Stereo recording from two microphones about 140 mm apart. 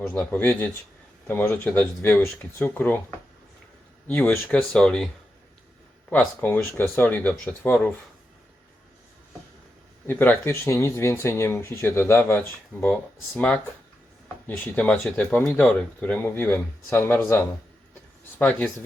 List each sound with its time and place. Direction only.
0.0 s speech: 15° left (ahead or behind)
4.0 s speech: 10° left (ahead or behind)
6.1 s speech: 10° left (ahead or behind)
10.1 s speech: 15° left (ahead or behind)